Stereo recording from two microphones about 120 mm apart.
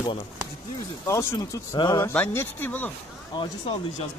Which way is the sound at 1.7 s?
35° left (ahead or behind).